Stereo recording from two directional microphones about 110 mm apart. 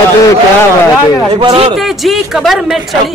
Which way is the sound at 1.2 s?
40° right (ahead or behind).